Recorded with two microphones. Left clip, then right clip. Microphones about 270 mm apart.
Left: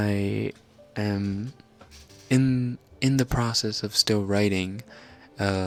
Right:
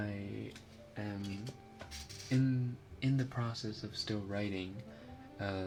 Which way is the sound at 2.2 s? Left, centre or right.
Left.